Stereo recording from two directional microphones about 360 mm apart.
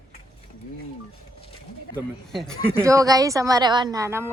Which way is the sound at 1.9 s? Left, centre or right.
Centre.